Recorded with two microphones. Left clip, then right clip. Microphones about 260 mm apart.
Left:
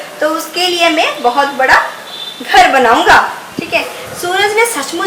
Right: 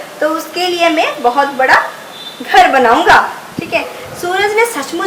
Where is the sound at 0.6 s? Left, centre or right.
Centre.